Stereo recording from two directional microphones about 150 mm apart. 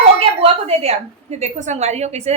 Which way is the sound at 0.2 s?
40° right (ahead or behind).